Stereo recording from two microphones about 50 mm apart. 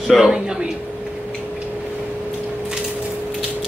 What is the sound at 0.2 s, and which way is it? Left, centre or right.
Chuckle, centre.